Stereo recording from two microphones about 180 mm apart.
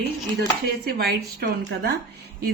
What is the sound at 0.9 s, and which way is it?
Speech, 60° right (ahead or behind).